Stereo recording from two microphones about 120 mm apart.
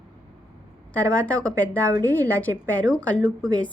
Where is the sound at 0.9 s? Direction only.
10° left (ahead or behind).